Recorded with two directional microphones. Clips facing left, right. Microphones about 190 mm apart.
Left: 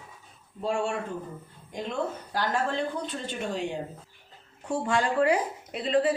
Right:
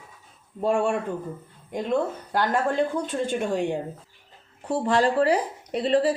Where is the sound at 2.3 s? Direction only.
55° right (ahead or behind).